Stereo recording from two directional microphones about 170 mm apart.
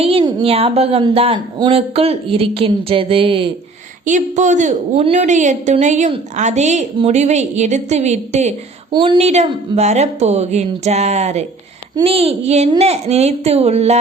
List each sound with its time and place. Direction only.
0.0 s speech: 30° right (ahead or behind)
4.0 s a woman's voice: 45° right (ahead or behind)
8.9 s speech: 30° right (ahead or behind)